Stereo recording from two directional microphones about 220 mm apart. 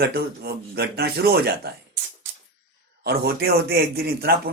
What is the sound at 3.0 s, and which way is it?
Speech, 45° right (ahead or behind).